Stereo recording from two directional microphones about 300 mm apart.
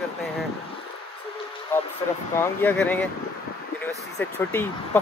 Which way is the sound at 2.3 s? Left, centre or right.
Centre.